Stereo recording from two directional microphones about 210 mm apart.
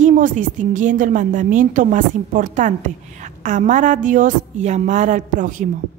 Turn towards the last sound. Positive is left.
turn(degrees=-40)  # may be behind; listen again after turning